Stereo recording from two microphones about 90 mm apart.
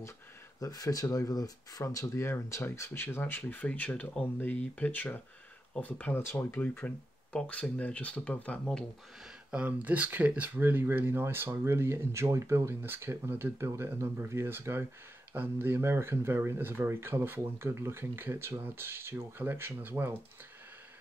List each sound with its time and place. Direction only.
0.6 s speech: 40° left (ahead or behind); by 8.5 s 15° left (ahead or behind)
9.5 s speech: 15° right (ahead or behind)